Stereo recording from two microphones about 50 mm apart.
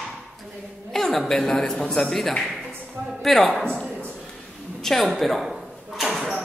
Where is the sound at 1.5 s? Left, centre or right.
Centre.